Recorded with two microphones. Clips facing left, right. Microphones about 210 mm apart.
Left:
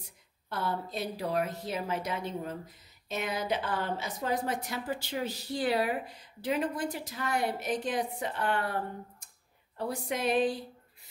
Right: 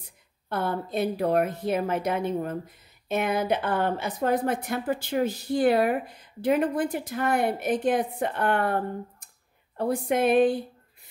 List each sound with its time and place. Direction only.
0.5 s a woman's voice: 55° right (ahead or behind)